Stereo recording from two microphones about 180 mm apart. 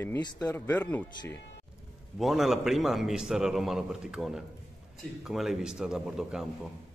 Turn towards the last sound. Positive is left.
turn(degrees=0)  # may be behind; listen again after turning